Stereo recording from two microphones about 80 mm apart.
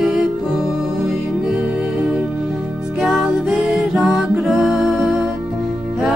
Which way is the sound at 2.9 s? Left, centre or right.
Centre.